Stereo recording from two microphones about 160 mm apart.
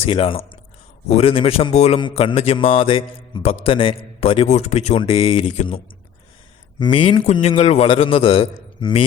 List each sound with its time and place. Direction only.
0.0 s a man's voice: 35° left (ahead or behind)
6.7 s a man's voice: 30° left (ahead or behind)